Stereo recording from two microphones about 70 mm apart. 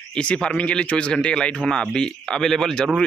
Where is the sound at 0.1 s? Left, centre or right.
Centre.